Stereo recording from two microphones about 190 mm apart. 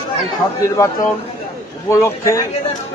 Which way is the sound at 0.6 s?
15° left (ahead or behind).